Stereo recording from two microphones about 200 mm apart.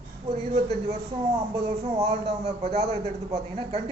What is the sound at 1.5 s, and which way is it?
Speech, 30° right (ahead or behind).